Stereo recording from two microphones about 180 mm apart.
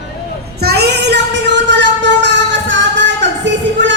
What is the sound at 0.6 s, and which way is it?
Child singing, 65° right (ahead or behind).